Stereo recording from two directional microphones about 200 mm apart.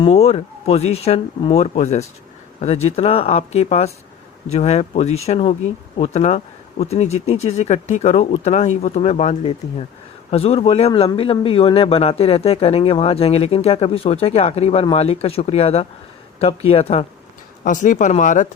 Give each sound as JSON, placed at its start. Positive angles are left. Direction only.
{"t": 0.0, "sound": "speech", "side_deg": 30}
{"t": 17.6, "sound": "speech", "side_deg": 40}